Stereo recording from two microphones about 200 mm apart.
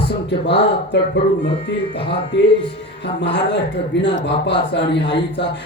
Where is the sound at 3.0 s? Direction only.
60° left (ahead or behind).